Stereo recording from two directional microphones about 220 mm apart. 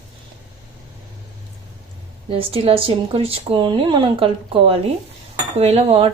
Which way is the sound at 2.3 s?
25° right (ahead or behind).